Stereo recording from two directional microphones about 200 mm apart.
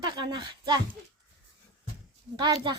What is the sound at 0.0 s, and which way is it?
Speech, 20° right (ahead or behind).